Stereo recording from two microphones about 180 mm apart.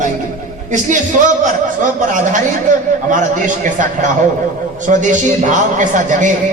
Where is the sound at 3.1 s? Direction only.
45° right (ahead or behind).